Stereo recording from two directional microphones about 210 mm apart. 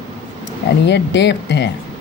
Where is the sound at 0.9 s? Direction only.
55° left (ahead or behind).